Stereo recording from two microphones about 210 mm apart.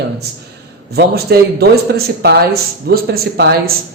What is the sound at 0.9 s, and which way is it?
Speech, 50° right (ahead or behind).